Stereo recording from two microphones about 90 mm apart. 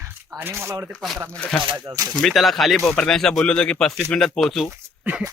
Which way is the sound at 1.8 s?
45° right (ahead or behind).